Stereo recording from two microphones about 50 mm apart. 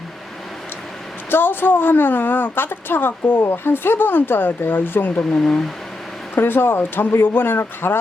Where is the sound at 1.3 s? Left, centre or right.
Left.